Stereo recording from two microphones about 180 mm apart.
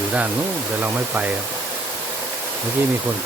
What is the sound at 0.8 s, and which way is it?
Speech, 10° right (ahead or behind).